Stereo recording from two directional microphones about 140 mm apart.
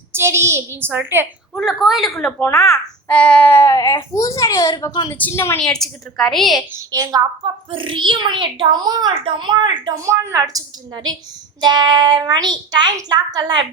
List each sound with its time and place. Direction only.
0.1 s a woman's voice: 20° right (ahead or behind)
1.5 s a woman's voice: centre (ahead or behind)
2.4 s speech: 20° left (ahead or behind)
3.1 s speech: 10° left (ahead or behind); by 5.0 s 30° left (ahead or behind)
5.1 s speech: 15° left (ahead or behind)
5.5 s a woman's voice: 5° left (ahead or behind)
6.7 s a woman's voice: 25° right (ahead or behind)
7.7 s a child's voice: 35° right (ahead or behind)
10.1 s a woman's voice: 20° right (ahead or behind)